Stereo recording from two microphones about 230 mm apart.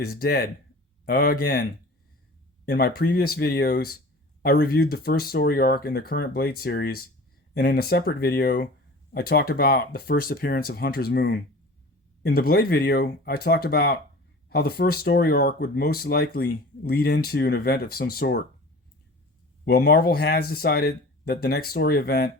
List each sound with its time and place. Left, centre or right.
0.0 s speech: left
2.6 s speech: left
19.6 s speech: left